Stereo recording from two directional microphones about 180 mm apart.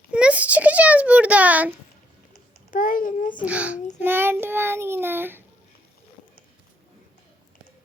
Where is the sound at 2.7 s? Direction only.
50° left (ahead or behind).